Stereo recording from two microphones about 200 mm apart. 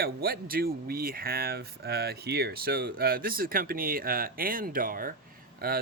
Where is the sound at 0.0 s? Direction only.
50° right (ahead or behind).